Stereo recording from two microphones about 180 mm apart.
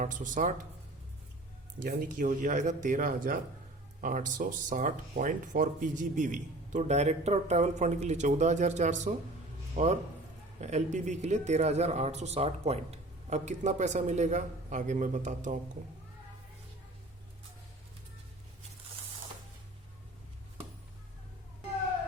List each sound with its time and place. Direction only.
0.0 s speech: 45° right (ahead or behind)
1.8 s speech: 50° right (ahead or behind)